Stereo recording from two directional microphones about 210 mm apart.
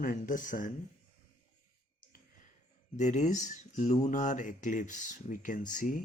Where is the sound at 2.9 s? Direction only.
35° left (ahead or behind).